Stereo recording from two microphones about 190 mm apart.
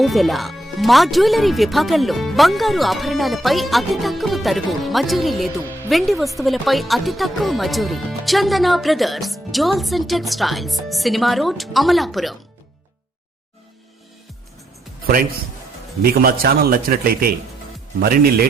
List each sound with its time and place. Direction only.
0.0 s speech: centre (ahead or behind)
16.0 s a man's voice: 50° right (ahead or behind)